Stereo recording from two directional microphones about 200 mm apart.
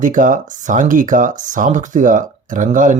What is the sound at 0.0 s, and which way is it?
Speech, 40° right (ahead or behind).